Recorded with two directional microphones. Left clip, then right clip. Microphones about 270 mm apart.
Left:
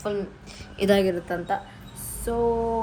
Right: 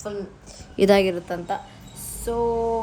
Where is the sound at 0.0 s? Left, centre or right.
Centre.